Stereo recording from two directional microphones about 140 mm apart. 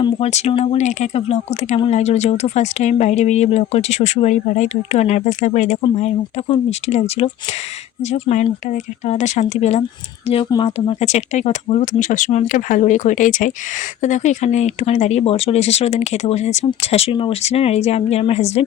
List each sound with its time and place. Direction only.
0.2 s speech: 50° left (ahead or behind)
6.5 s speech: 50° left (ahead or behind)